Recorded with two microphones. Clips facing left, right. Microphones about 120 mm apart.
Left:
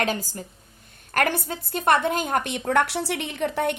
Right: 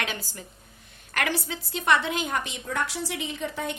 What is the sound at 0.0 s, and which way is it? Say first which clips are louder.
A woman's voice: left 7 dB; 40° left (ahead or behind).